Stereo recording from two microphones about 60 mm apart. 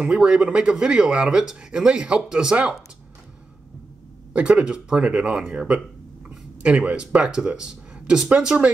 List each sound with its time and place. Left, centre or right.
0.0 s speech: centre
4.3 s speech: centre